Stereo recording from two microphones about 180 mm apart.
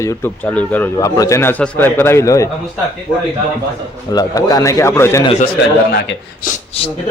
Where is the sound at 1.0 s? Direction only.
20° left (ahead or behind).